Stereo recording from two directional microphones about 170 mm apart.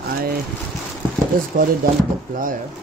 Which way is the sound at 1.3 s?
55° right (ahead or behind).